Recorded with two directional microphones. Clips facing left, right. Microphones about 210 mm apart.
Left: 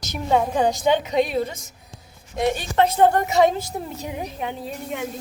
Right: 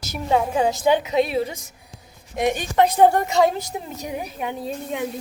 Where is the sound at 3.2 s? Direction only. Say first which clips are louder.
Left 1 dB; centre (ahead or behind).